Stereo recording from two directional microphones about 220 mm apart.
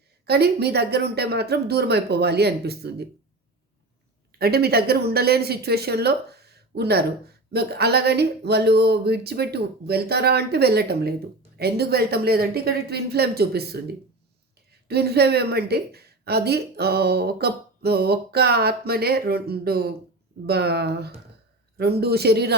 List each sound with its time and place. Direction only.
0.3 s a woman's voice: 45° right (ahead or behind)
4.3 s a woman's voice: 45° right (ahead or behind)